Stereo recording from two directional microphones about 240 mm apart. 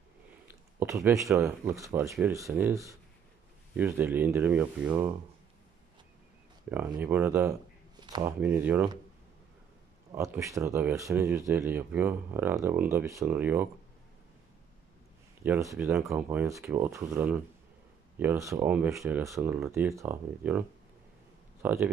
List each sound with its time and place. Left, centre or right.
0.5 s speech: centre
6.7 s speech: centre
8.0 s a sound: centre
8.4 s speech: centre
10.1 s speech: centre
15.4 s speech: centre
21.6 s speech: centre